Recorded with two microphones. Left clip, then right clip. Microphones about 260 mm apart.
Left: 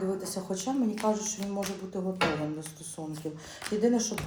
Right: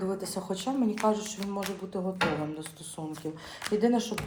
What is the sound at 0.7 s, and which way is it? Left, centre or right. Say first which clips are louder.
Speech: right 2 dB; right.